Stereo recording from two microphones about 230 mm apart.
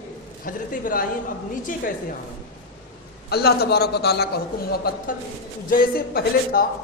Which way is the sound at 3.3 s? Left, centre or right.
Left.